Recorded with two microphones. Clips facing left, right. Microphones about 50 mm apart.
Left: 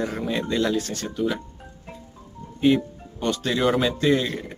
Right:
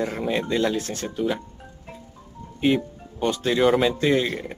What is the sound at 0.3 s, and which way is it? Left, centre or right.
Speech, right.